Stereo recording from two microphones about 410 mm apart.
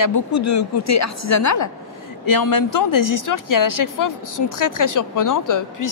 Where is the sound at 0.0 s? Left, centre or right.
Left.